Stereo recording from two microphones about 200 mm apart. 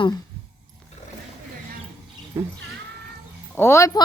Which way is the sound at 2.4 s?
15° right (ahead or behind).